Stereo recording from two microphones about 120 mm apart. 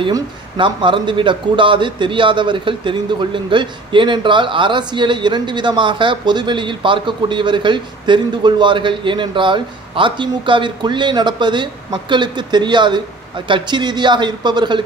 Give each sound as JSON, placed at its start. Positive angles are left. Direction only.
{"t": 0.6, "sound": "a man's voice", "side_deg": -45}